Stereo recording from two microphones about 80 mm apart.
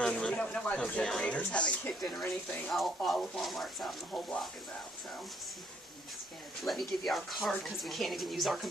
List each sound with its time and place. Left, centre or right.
0.0 s speech: centre
2.0 s speech: centre
6.6 s speech: centre